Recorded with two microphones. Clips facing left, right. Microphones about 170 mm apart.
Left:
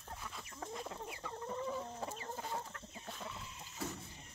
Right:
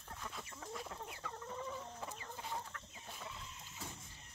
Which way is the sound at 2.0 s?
35° left (ahead or behind).